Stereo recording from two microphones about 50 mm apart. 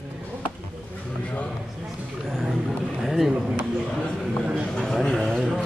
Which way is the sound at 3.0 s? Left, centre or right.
Centre.